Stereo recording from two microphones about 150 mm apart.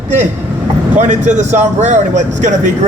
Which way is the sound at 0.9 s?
55° right (ahead or behind).